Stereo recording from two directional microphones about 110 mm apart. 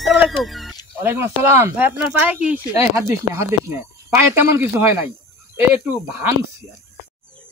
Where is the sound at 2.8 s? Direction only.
25° right (ahead or behind).